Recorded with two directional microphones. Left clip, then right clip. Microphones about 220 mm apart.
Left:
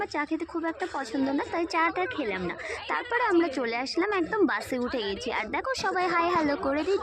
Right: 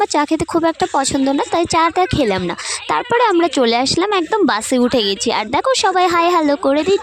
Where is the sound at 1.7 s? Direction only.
60° right (ahead or behind).